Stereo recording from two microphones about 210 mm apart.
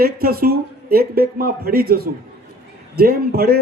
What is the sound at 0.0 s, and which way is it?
A man's voice, 45° right (ahead or behind).